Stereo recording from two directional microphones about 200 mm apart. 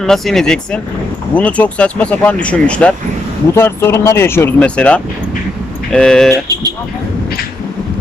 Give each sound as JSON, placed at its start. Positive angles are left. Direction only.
{"t": 0.0, "sound": "speech", "side_deg": 0}
{"t": 6.3, "sound": "vehicle", "side_deg": -20}